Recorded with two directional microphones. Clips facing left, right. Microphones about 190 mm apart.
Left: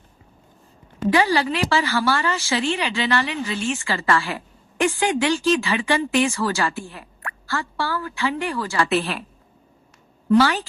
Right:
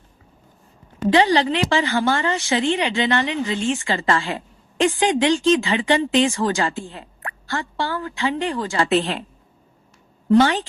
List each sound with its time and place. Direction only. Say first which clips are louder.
1.1 s a woman's voice: right 3 dB; 20° right (ahead or behind)
10.2 s a woman's voice: right 2 dB; 20° right (ahead or behind)